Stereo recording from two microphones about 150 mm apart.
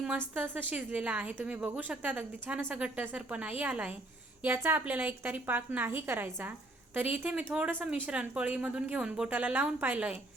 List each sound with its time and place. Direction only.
0.3 s a woman's voice: 10° right (ahead or behind)